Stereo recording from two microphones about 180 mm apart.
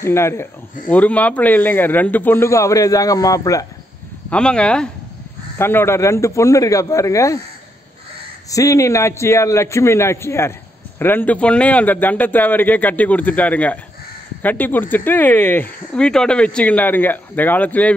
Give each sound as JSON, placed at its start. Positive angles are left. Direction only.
{"t": 0.0, "sound": "speech", "side_deg": 15}
{"t": 4.3, "sound": "speech", "side_deg": 5}
{"t": 8.5, "sound": "speech", "side_deg": 20}